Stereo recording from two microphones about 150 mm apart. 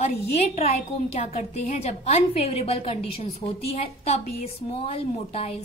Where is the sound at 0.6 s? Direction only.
45° left (ahead or behind).